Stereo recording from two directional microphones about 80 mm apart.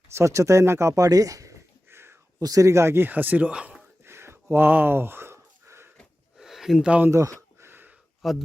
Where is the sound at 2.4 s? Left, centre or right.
Right; by 3.8 s centre.